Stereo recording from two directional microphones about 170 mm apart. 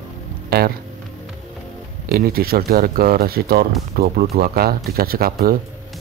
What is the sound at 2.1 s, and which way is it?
Speech, 65° right (ahead or behind).